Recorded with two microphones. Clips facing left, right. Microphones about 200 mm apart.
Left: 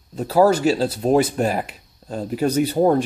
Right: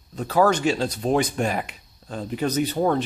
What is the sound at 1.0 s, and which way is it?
Speech, 40° left (ahead or behind).